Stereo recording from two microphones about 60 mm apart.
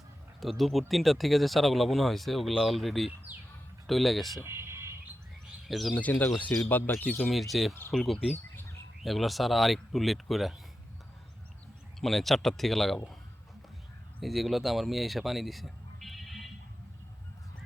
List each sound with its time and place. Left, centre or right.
0.3 s speech: centre
4.4 s a sound: right
5.6 s speech: centre
5.9 s speech: left
7.3 s speech: centre
11.9 s speech: centre
14.2 s speech: centre